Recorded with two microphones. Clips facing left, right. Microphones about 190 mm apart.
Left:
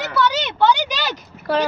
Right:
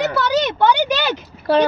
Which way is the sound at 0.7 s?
55° right (ahead or behind).